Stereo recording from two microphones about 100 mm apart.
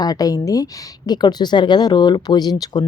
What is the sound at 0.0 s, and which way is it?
Speech, 40° left (ahead or behind).